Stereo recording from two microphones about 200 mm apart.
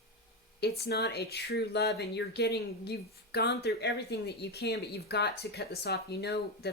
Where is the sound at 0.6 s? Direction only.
50° left (ahead or behind).